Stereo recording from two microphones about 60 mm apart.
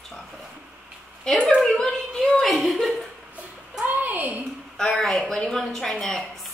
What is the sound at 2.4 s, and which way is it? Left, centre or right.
Speech, centre.